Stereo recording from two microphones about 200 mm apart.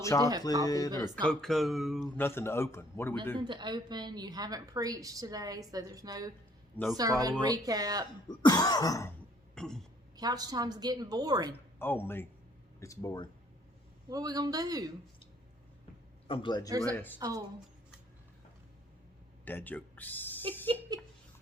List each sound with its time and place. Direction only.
0.0 s a man's voice: 15° left (ahead or behind)
1.1 s speech: 5° left (ahead or behind)
2.1 s a man's voice: 10° left (ahead or behind)
3.3 s speech: 25° right (ahead or behind)
8.3 s throat clearing: 20° left (ahead or behind)
9.6 s speech: 5° left (ahead or behind)
10.2 s speech: 20° right (ahead or behind)
11.5 s a man's voice: 10° left (ahead or behind)
14.1 s speech: 20° right (ahead or behind)
16.2 s a man's voice: 25° left (ahead or behind)
16.6 s speech: 15° right (ahead or behind)
16.9 s a man's voice: 10° left (ahead or behind)
17.2 s speech: 20° right (ahead or behind)
19.5 s speech: 10° left (ahead or behind)